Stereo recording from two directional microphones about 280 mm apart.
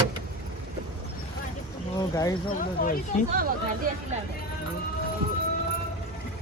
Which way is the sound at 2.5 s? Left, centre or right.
Left.